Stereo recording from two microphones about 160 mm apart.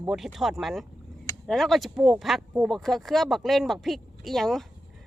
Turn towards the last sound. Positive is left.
turn(degrees=0)  # may be behind; listen again after turning